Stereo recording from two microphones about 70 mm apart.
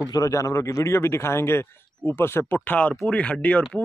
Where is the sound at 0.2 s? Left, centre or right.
Left.